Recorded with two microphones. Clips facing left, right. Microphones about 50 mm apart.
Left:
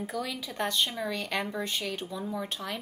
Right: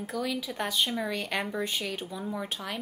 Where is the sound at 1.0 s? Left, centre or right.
Right.